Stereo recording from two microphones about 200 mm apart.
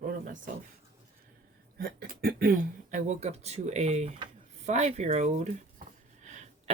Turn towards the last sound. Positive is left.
turn(degrees=-35)  # may be behind; listen again after turning